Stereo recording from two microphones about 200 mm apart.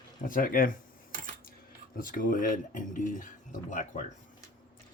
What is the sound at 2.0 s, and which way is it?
Speech, 45° left (ahead or behind).